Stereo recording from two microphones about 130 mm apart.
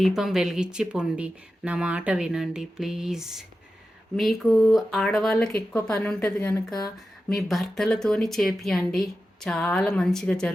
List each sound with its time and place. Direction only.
0.0 s speech: 5° right (ahead or behind)
6.7 s speech: 30° left (ahead or behind)
7.3 s speech: centre (ahead or behind)